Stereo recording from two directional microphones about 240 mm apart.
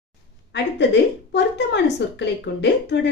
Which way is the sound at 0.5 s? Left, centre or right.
Left.